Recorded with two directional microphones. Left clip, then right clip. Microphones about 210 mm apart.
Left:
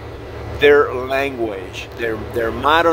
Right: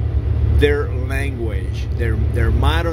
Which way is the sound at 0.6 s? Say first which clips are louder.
Left 7 dB; 35° left (ahead or behind).